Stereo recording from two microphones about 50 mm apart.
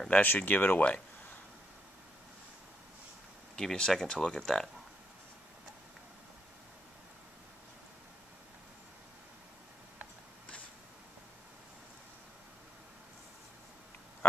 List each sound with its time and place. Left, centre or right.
0.1 s speech: left
3.5 s speech: centre